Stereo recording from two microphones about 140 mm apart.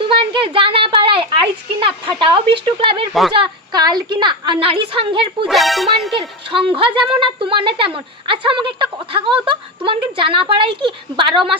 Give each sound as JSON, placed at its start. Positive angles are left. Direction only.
{"t": 0.0, "sound": "a woman's voice", "side_deg": -40}
{"t": 3.1, "sound": "speech", "side_deg": 0}
{"t": 3.3, "sound": "a woman's voice", "side_deg": -35}
{"t": 5.5, "sound": "speech", "side_deg": 0}
{"t": 6.5, "sound": "a woman's voice", "side_deg": -40}